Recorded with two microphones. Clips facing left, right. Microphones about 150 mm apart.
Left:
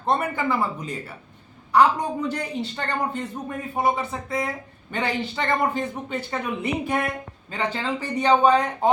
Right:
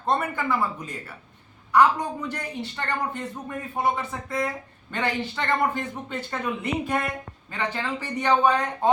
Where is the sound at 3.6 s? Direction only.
10° left (ahead or behind).